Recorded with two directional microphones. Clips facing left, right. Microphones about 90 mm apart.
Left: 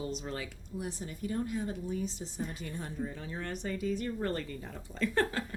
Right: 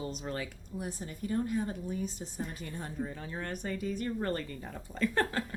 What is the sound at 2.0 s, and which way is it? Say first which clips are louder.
A woman's voice: even; 45° right (ahead or behind).